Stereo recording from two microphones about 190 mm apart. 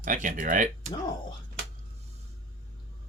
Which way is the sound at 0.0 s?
45° right (ahead or behind).